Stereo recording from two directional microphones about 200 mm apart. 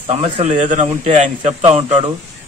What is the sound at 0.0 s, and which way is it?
A man's voice, 30° right (ahead or behind).